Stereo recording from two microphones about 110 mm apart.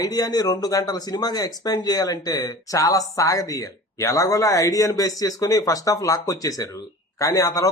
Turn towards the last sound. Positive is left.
turn(degrees=30)  # may be behind; listen again after turning